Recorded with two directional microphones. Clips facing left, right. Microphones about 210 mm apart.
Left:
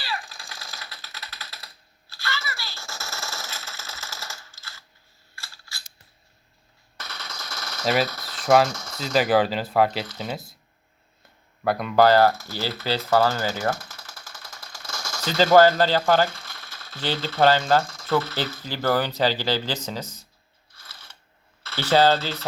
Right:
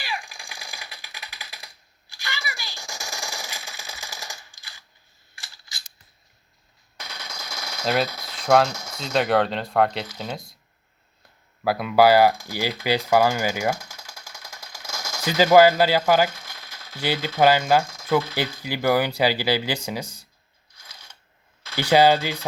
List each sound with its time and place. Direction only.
0.0 s typewriter: 15° right (ahead or behind)
5.3 s coin: 15° right (ahead or behind)
6.9 s machine gun: 10° right (ahead or behind)
8.4 s speech: 5° left (ahead or behind)
8.7 s speech: 10° right (ahead or behind)
9.0 s speech: 5° left (ahead or behind)
11.6 s speech: 5° right (ahead or behind)
20.7 s crunch: 15° right (ahead or behind)
21.6 s speech: 10° right (ahead or behind)